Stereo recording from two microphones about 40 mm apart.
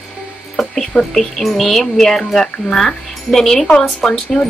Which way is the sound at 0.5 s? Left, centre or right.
Centre.